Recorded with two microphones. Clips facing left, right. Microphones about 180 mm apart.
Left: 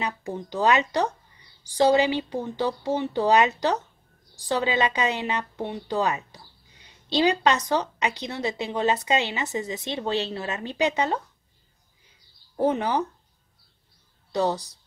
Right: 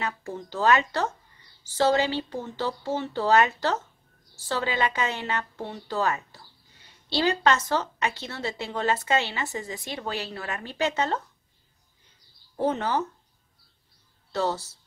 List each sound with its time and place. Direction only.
0.0 s a woman's voice: 15° left (ahead or behind)
12.5 s a woman's voice: 15° left (ahead or behind)
14.3 s a woman's voice: 15° left (ahead or behind)